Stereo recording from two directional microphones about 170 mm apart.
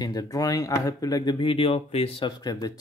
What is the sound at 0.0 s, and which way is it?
Speech, 20° left (ahead or behind).